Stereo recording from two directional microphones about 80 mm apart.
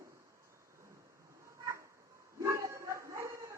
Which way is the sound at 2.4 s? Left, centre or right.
Right.